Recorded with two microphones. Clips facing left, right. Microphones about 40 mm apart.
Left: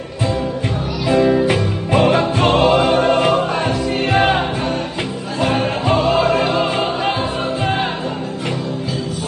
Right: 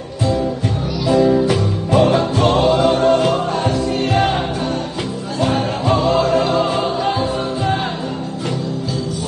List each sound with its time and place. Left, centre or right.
1.1 s music: left
5.5 s music: left
6.1 s music: left